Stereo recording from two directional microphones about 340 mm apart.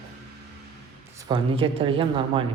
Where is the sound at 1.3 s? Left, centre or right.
Centre.